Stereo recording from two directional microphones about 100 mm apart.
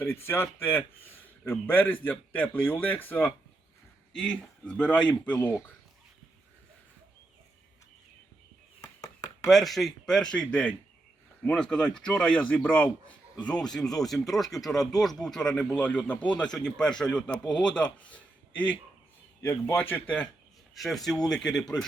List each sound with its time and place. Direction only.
0.0 s speech: 25° left (ahead or behind)
4.1 s a man's voice: 10° left (ahead or behind)
8.8 s a sound: 35° left (ahead or behind)
9.5 s a man's voice: centre (ahead or behind)
19.4 s speech: 25° left (ahead or behind)
20.7 s speech: centre (ahead or behind)